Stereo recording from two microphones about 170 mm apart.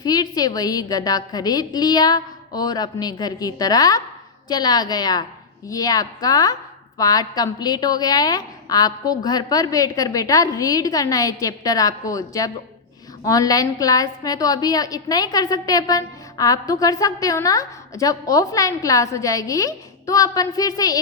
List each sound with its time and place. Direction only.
0.0 s a woman's voice: 25° left (ahead or behind)